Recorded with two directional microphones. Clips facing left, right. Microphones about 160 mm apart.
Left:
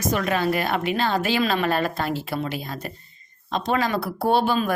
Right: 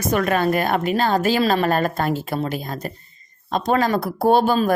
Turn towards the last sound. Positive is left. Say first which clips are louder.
# right 4 dB
turn(degrees=-40)  # may be behind; listen again after turning